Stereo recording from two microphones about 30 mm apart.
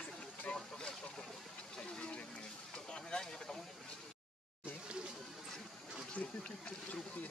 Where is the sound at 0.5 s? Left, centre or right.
Left.